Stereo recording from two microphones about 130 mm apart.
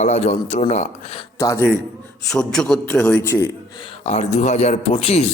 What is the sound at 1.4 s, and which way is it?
Speech, 25° left (ahead or behind).